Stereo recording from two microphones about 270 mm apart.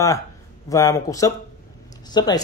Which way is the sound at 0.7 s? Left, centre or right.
Centre.